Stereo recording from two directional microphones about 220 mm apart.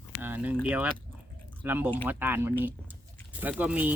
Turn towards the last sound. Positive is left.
turn(degrees=-5)  # may be behind; listen again after turning